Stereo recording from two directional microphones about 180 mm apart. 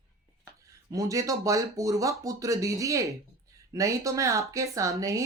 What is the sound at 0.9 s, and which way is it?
Speech, 20° right (ahead or behind).